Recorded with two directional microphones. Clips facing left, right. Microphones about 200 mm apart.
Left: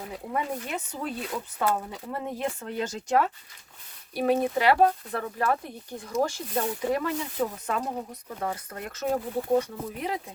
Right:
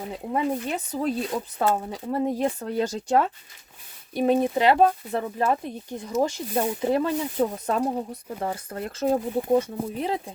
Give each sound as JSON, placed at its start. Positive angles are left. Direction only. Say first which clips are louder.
{"t": 0.1, "sound": "speech", "louder": "right 5 dB", "side_deg": -30}
{"t": 4.1, "sound": "speech", "louder": "right 3 dB", "side_deg": -20}